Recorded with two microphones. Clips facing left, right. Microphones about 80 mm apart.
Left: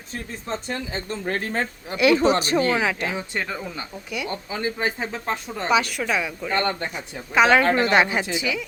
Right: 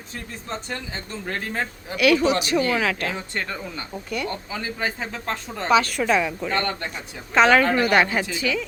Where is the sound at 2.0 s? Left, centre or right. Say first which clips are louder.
Left 1 dB; left.